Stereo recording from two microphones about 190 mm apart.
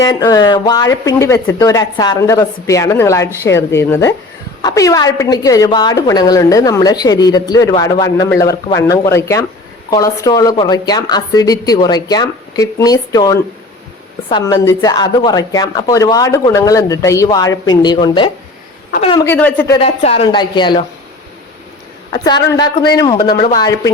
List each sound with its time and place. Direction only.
0.0 s a woman's voice: 20° left (ahead or behind)
19.2 s a woman's voice: 10° left (ahead or behind)
19.8 s a woman's voice: 30° left (ahead or behind)
22.1 s a woman's voice: 20° left (ahead or behind)